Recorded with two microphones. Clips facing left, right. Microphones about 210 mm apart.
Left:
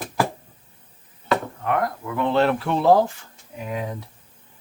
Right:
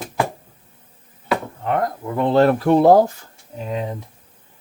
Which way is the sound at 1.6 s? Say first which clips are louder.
Right 2 dB; 30° right (ahead or behind).